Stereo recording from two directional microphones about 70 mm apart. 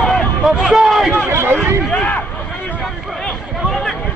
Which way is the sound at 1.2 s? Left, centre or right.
Right.